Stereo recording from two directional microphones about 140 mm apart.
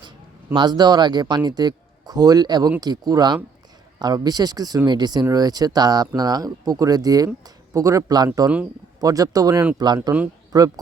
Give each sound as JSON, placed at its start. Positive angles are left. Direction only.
{"t": 0.5, "sound": "a man's voice", "side_deg": -30}